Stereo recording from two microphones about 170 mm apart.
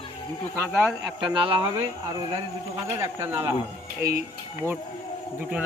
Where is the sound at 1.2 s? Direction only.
30° right (ahead or behind).